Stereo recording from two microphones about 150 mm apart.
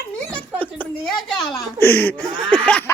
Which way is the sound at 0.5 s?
10° left (ahead or behind).